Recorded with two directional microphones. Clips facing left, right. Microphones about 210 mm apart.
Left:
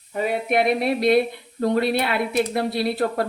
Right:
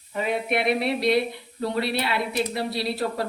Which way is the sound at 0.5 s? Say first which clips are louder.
Left 4 dB; 50° left (ahead or behind).